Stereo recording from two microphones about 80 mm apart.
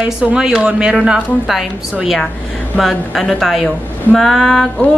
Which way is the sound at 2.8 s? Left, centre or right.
Centre.